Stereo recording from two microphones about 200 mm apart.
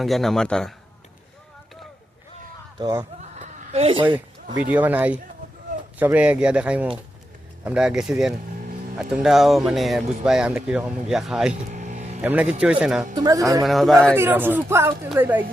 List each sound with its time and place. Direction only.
0.0 s speech: centre (ahead or behind)
2.7 s speech: 15° right (ahead or behind)
3.2 s chuckle: 35° right (ahead or behind)
4.7 s speech: 10° right (ahead or behind)
11.7 s vehicle: 35° right (ahead or behind)
12.2 s speech: 5° right (ahead or behind)
13.1 s speech: 20° right (ahead or behind)
13.7 s speech: centre (ahead or behind)
14.2 s speech: 10° right (ahead or behind)